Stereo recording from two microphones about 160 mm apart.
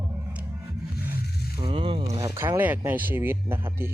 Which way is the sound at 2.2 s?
20° right (ahead or behind).